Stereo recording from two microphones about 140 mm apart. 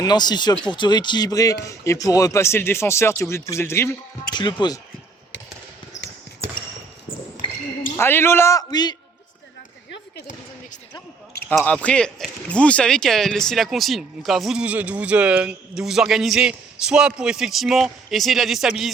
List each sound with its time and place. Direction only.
0.0 s speech: 30° left (ahead or behind)
4.4 s speech: 35° left (ahead or behind)
7.9 s a man's voice: 15° left (ahead or behind)
11.6 s speech: 10° left (ahead or behind)